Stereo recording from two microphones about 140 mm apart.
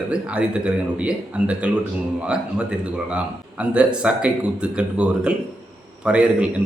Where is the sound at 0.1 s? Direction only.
10° right (ahead or behind).